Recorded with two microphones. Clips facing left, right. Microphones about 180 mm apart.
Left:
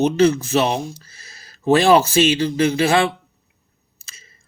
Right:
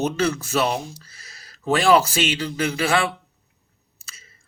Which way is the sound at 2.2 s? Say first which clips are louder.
Left 7 dB; 25° left (ahead or behind).